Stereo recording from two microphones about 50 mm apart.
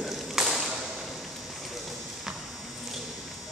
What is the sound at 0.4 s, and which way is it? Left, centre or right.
Thump, centre.